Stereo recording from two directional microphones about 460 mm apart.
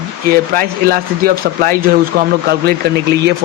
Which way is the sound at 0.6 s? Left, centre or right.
Centre.